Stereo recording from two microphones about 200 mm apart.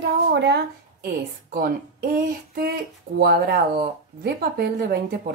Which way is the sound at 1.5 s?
45° right (ahead or behind).